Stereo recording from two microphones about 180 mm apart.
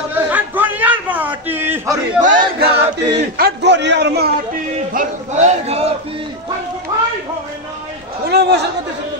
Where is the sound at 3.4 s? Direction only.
70° right (ahead or behind).